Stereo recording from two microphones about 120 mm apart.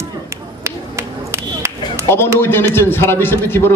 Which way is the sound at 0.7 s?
20° right (ahead or behind).